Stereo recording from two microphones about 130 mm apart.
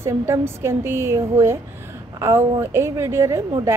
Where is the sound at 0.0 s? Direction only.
20° right (ahead or behind).